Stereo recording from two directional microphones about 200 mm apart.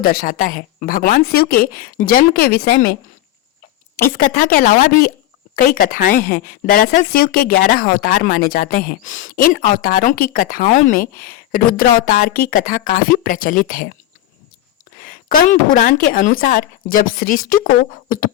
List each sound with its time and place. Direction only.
0.0 s speech: 45° left (ahead or behind)
4.0 s speech: 45° left (ahead or behind)
14.9 s a woman's voice: 45° left (ahead or behind)